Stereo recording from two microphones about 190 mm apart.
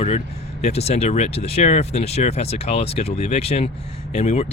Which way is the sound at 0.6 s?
35° left (ahead or behind).